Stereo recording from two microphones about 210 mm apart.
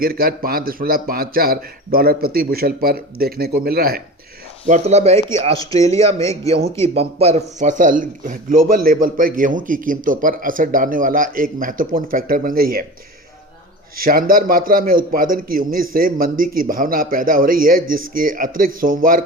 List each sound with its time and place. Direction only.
0.0 s a man's voice: 45° right (ahead or behind)
4.7 s a man's voice: 30° right (ahead or behind)
5.5 s speech: 15° left (ahead or behind)
6.8 s a man's voice: 30° right (ahead or behind)
13.9 s a man's voice: 45° right (ahead or behind)